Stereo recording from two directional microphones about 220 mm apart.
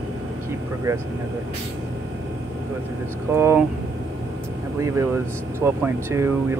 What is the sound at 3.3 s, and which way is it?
Speech, 10° right (ahead or behind).